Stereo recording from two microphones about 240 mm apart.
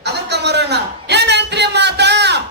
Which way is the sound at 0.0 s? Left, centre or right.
Right.